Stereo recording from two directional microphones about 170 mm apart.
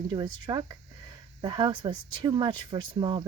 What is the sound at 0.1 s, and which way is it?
Speech, 25° right (ahead or behind).